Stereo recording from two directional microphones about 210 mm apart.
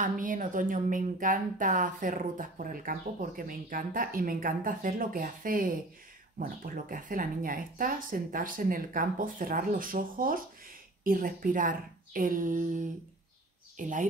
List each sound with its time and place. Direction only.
0.0 s speech: 40° right (ahead or behind)